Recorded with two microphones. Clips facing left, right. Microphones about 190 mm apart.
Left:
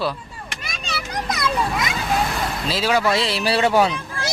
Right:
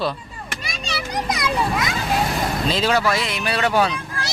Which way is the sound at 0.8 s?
10° right (ahead or behind).